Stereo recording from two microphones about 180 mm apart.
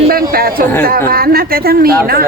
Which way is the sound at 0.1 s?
55° right (ahead or behind).